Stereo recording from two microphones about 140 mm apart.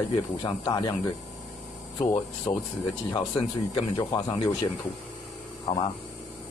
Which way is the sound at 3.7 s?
30° left (ahead or behind).